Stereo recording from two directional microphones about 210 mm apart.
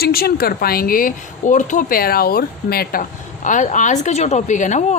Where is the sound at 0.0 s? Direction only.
45° left (ahead or behind).